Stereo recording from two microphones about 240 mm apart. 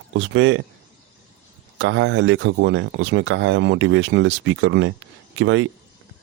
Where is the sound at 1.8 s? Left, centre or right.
Right.